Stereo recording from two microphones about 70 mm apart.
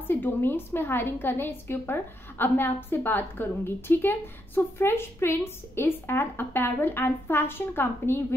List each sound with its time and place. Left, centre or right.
0.1 s a woman's voice: left